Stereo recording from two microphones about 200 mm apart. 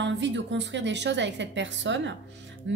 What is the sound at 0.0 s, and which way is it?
A woman's voice, 65° right (ahead or behind).